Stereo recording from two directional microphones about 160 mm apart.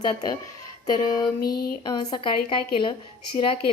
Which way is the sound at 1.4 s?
70° left (ahead or behind).